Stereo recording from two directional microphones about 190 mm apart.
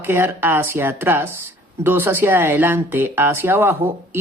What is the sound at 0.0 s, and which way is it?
Speech, 10° right (ahead or behind).